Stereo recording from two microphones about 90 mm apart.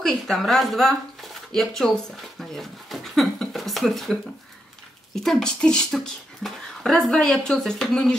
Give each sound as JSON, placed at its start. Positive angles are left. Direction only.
{"t": 0.0, "sound": "speech", "side_deg": 5}
{"t": 2.5, "sound": "a sound", "side_deg": 0}
{"t": 5.1, "sound": "speech", "side_deg": 0}